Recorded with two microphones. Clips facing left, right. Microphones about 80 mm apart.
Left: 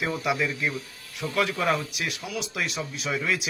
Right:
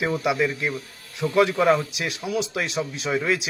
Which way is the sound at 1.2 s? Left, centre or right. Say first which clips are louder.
Right 7 dB; right.